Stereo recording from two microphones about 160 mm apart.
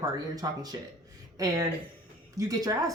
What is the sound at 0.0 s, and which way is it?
Speech, 25° right (ahead or behind).